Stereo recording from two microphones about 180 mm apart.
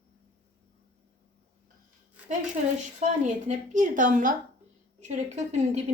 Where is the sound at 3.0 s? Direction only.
45° right (ahead or behind).